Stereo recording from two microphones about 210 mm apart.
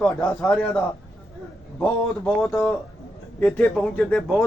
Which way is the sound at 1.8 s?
5° left (ahead or behind).